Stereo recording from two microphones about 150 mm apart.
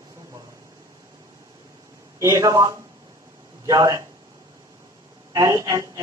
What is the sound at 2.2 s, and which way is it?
A man's voice, 20° right (ahead or behind).